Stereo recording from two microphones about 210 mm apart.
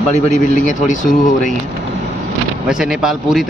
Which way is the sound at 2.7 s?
Centre (ahead or behind).